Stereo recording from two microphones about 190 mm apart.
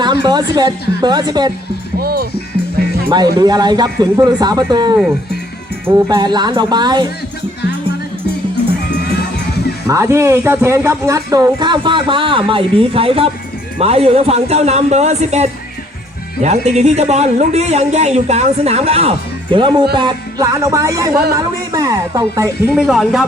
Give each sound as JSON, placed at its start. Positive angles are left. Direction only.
{"t": 0.0, "sound": "speech", "side_deg": -25}
{"t": 2.0, "sound": "music", "side_deg": -55}
{"t": 3.3, "sound": "speech", "side_deg": -20}
{"t": 6.1, "sound": "speech", "side_deg": -25}
{"t": 9.8, "sound": "speech", "side_deg": -15}
{"t": 22.7, "sound": "speech", "side_deg": 0}